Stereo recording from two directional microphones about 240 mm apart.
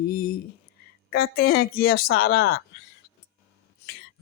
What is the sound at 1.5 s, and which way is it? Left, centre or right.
Speech, left.